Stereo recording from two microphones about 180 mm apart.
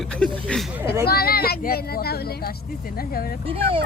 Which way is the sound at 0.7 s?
15° right (ahead or behind).